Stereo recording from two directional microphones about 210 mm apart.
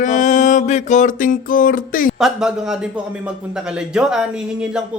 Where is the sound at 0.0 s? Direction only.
35° left (ahead or behind).